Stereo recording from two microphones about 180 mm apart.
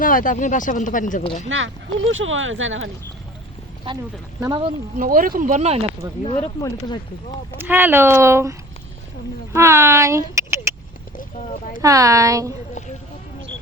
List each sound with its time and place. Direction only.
0.0 s speech: 50° left (ahead or behind)
1.2 s speech: 30° left (ahead or behind)
1.5 s speech: 90° right
4.4 s speech: 15° right (ahead or behind)
4.9 s speech: 50° right (ahead or behind)
6.2 s speech: 35° left (ahead or behind)
6.6 s speech: 20° left (ahead or behind)
7.6 s speech: 10° right (ahead or behind)
11.2 s speech: 45° left (ahead or behind)
11.8 s speech: 20° right (ahead or behind)